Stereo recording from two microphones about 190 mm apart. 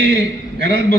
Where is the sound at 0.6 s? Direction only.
50° left (ahead or behind).